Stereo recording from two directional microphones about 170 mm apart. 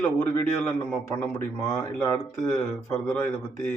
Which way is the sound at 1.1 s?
15° left (ahead or behind).